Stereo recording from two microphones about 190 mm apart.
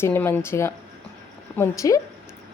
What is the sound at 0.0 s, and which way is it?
A woman's voice, 10° left (ahead or behind).